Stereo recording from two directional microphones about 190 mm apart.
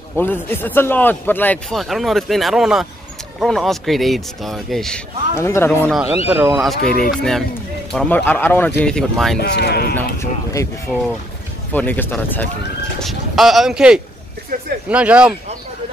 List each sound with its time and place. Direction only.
0.2 s a man's voice: 10° left (ahead or behind)
5.4 s speech: 15° left (ahead or behind)
5.9 s a man's voice: 5° right (ahead or behind)
9.4 s speech: 60° left (ahead or behind)
9.9 s speech: 15° left (ahead or behind)
13.0 s a man's voice: centre (ahead or behind)